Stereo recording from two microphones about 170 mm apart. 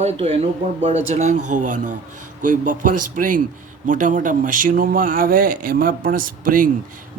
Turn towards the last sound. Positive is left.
turn(degrees=-55)  # may be behind; listen again after turning